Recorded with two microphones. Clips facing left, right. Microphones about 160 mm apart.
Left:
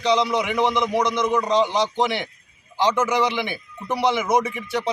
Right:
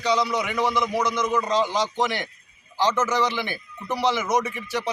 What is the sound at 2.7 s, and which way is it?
A man's voice, 15° left (ahead or behind).